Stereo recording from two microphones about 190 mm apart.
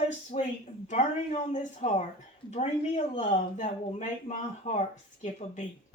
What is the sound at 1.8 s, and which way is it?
Speech, 40° left (ahead or behind).